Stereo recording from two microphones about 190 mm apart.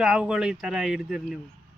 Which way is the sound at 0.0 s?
5° right (ahead or behind).